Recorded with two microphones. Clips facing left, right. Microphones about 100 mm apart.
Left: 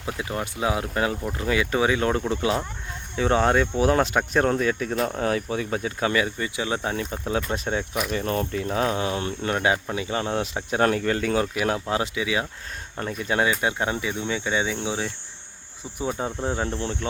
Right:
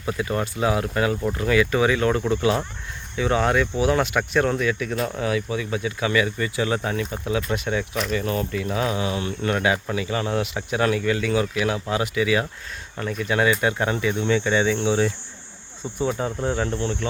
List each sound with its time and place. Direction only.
0.0 s speech: 20° left (ahead or behind); by 6.2 s 40° left (ahead or behind)
6.2 s speech: 20° left (ahead or behind)
7.3 s speech: 35° left (ahead or behind)
9.4 s speech: 25° left (ahead or behind)
13.2 s speech: 30° left (ahead or behind); by 15.0 s 10° left (ahead or behind)
16.0 s speech: 20° left (ahead or behind)